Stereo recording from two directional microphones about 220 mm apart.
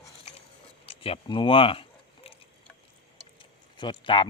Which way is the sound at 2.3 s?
25° left (ahead or behind).